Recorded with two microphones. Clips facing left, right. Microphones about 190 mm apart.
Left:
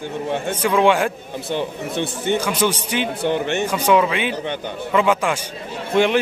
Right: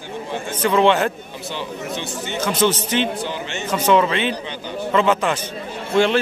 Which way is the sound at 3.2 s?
60° left (ahead or behind).